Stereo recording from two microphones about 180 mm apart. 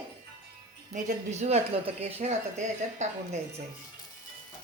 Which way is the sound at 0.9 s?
40° right (ahead or behind).